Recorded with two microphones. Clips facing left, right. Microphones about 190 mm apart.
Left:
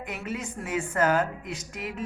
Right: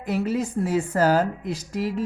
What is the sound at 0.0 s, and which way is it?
Speech, 35° right (ahead or behind).